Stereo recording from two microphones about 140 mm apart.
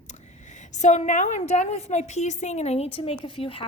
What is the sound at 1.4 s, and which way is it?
A woman's voice, 50° left (ahead or behind).